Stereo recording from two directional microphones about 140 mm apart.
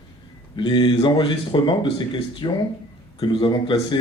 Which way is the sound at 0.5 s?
35° left (ahead or behind).